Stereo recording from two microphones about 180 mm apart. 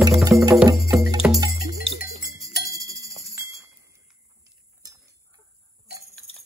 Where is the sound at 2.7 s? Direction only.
20° right (ahead or behind).